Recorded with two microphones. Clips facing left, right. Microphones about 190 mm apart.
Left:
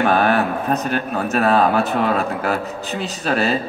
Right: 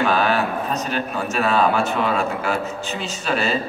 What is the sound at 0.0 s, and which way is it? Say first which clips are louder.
A man's voice: left 3 dB; 55° left (ahead or behind).